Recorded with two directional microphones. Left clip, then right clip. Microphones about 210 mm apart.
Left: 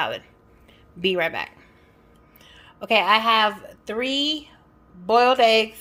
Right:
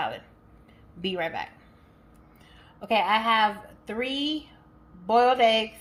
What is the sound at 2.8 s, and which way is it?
A woman's voice, 50° left (ahead or behind).